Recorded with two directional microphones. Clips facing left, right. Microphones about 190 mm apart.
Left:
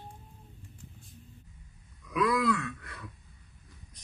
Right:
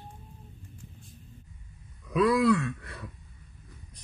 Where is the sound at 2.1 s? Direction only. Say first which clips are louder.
Right 5 dB; 30° right (ahead or behind).